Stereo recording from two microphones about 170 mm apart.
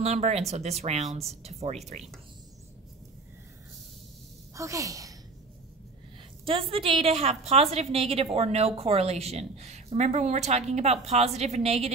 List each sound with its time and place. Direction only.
0.0 s a woman's voice: 40° right (ahead or behind)
4.6 s a woman's voice: 20° right (ahead or behind)
6.7 s a woman's voice: 35° right (ahead or behind)